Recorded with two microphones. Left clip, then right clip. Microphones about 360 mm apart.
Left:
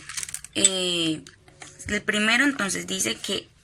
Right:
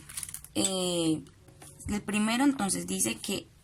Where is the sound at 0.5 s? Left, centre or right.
Centre.